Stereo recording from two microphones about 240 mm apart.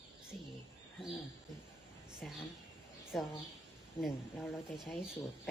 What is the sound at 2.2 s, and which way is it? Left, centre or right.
Speech, centre.